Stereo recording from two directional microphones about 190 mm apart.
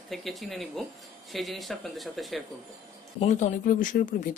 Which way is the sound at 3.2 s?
40° left (ahead or behind).